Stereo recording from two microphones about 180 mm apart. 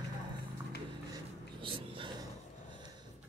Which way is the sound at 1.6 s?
30° right (ahead or behind).